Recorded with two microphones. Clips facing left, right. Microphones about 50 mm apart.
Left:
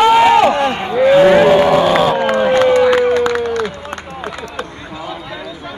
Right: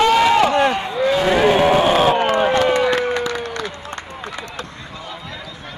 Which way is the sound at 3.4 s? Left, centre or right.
Left.